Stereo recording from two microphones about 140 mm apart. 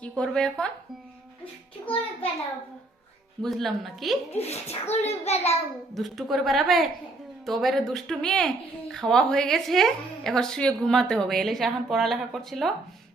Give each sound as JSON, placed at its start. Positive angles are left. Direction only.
{"t": 0.0, "sound": "speech", "side_deg": 5}
{"t": 3.4, "sound": "speech", "side_deg": 0}
{"t": 4.3, "sound": "a child's voice", "side_deg": 50}
{"t": 5.9, "sound": "speech", "side_deg": 0}